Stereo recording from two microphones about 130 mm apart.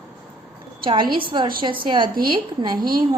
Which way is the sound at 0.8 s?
40° right (ahead or behind).